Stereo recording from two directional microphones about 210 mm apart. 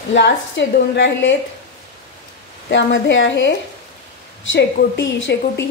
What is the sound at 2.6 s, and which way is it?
A woman's voice, 60° left (ahead or behind).